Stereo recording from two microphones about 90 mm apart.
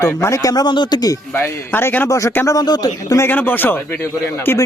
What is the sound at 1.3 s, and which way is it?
Speech, 25° left (ahead or behind).